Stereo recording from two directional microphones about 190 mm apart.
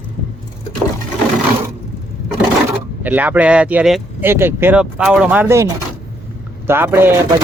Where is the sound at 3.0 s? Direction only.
10° right (ahead or behind).